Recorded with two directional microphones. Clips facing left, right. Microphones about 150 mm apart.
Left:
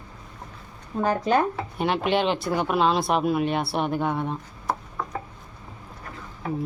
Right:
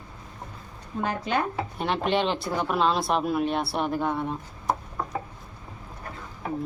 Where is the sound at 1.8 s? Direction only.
5° left (ahead or behind).